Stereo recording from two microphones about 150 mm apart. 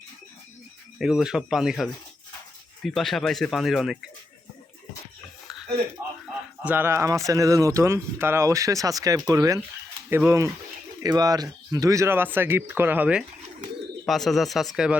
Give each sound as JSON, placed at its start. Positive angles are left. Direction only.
{"t": 0.9, "sound": "speech", "side_deg": -5}
{"t": 6.6, "sound": "speech", "side_deg": -10}
{"t": 14.1, "sound": "speech", "side_deg": 0}